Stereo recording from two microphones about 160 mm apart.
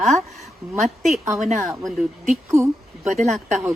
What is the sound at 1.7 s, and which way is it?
Speech, centre (ahead or behind).